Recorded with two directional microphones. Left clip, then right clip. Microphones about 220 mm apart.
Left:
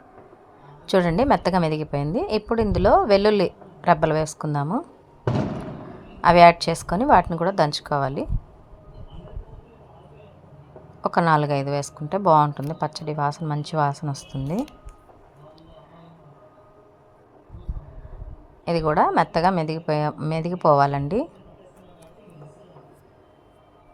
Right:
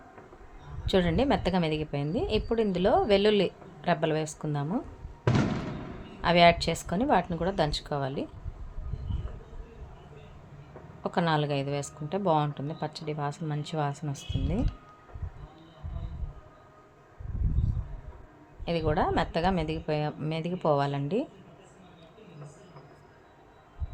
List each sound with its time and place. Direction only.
0.9 s a woman's voice: 20° left (ahead or behind)
6.2 s a woman's voice: 20° left (ahead or behind)
11.0 s a woman's voice: 20° left (ahead or behind)
18.6 s a woman's voice: 25° left (ahead or behind)